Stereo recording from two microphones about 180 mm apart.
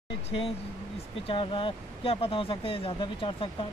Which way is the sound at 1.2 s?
30° left (ahead or behind).